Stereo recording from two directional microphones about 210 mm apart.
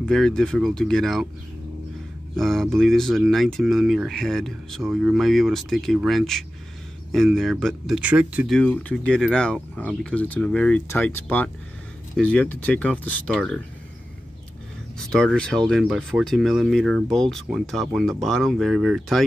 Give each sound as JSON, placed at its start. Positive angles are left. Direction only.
{"t": 0.0, "sound": "speech", "side_deg": 5}
{"t": 2.3, "sound": "speech", "side_deg": 0}
{"t": 15.0, "sound": "speech", "side_deg": 5}